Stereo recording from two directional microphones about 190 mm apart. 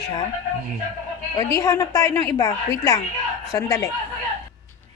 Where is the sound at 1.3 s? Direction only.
15° left (ahead or behind).